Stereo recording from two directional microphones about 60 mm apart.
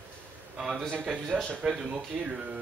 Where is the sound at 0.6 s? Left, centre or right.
Centre.